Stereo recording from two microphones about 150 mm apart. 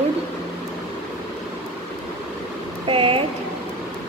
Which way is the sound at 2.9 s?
35° right (ahead or behind).